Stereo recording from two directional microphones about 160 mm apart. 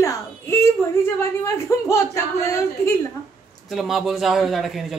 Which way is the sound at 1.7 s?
20° left (ahead or behind).